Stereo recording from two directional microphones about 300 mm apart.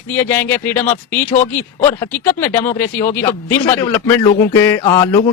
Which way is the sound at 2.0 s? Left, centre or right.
Centre.